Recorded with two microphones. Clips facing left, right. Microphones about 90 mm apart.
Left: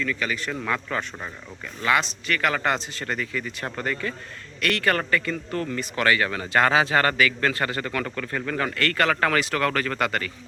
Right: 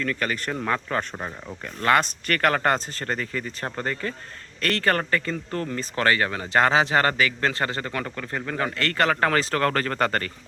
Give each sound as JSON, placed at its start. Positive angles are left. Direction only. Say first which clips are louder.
{"t": 0.0, "sound": "a man's voice", "louder": "right 1 dB", "side_deg": -50}